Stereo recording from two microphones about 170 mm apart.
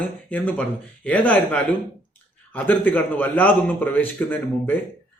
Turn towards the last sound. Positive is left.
turn(degrees=10)  # may be behind; listen again after turning